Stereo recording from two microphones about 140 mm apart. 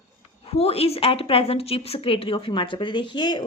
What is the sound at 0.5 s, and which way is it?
Speech, 45° left (ahead or behind).